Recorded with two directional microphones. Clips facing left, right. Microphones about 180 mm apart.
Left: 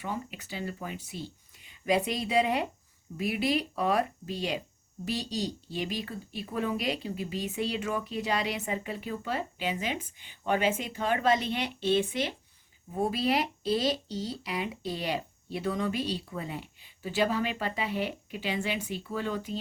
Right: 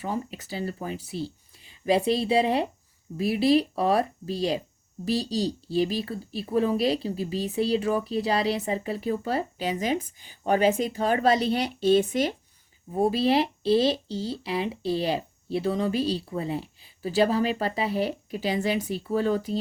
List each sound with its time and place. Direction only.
0.0 s speech: 35° right (ahead or behind)